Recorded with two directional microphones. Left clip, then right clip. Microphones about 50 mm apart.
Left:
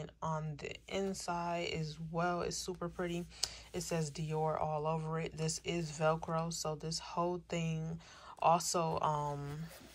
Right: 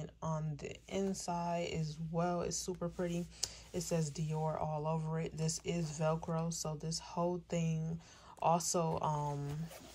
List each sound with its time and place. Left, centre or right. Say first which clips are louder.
0.0 s speech: left 2 dB; right